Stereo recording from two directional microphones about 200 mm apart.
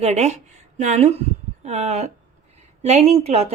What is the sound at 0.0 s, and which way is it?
A woman's voice, 35° right (ahead or behind).